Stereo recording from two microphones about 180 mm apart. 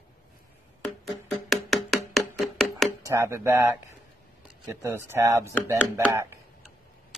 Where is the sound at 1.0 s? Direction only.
Centre (ahead or behind).